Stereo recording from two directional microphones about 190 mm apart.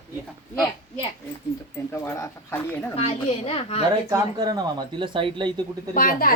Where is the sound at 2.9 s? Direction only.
30° left (ahead or behind).